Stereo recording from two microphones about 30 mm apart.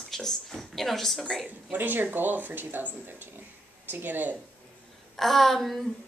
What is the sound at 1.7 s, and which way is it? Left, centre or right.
Speech, right.